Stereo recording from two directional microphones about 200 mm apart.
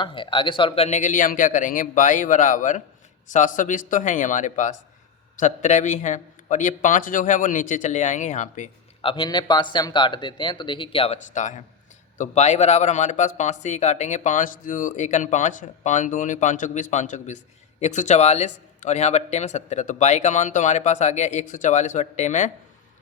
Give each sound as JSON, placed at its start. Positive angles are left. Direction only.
{"t": 0.0, "sound": "a man's voice", "side_deg": 25}